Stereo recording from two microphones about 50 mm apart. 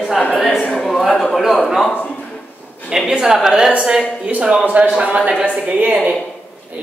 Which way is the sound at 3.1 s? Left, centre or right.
Centre.